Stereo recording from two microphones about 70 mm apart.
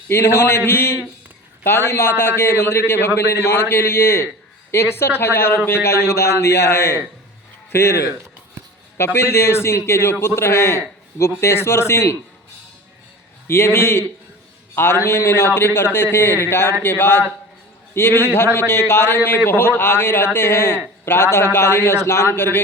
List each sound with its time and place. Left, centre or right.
0.1 s a man's voice: left
9.1 s a man's voice: left
13.5 s a man's voice: left